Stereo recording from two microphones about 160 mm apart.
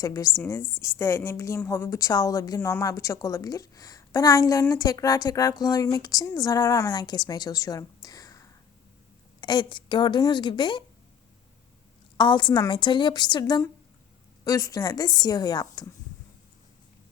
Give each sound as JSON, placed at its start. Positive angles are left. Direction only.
{"t": 0.0, "sound": "a woman's voice", "side_deg": 20}
{"t": 12.1, "sound": "a woman's voice", "side_deg": 30}